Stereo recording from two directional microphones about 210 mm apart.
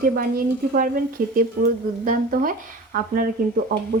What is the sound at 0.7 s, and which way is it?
Speech, 40° right (ahead or behind).